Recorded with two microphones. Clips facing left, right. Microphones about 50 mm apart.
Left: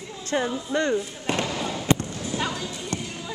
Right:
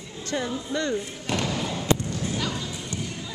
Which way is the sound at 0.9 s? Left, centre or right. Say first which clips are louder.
Left 2 dB; centre.